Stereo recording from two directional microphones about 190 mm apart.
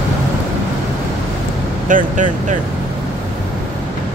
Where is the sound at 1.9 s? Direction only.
40° right (ahead or behind).